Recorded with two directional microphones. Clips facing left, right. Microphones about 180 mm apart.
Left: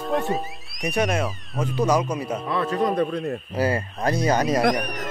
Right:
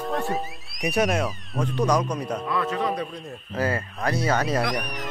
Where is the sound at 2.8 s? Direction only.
55° left (ahead or behind).